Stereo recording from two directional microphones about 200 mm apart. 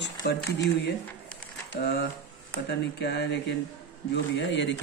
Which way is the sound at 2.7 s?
55° left (ahead or behind).